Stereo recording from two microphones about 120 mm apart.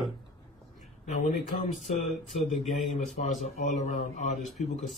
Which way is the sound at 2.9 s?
90° left.